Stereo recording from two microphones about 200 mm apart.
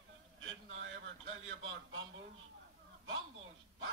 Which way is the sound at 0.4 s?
75° right (ahead or behind).